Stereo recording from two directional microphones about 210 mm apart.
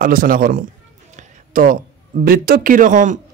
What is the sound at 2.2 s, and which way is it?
Speech, 45° right (ahead or behind).